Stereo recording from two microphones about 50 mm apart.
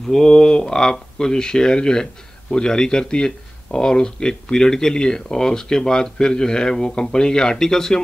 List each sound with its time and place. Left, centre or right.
0.0 s speech: centre